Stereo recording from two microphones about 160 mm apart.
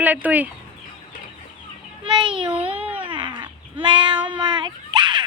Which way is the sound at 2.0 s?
30° right (ahead or behind).